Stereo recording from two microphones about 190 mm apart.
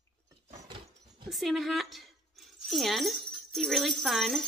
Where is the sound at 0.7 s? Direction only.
25° right (ahead or behind).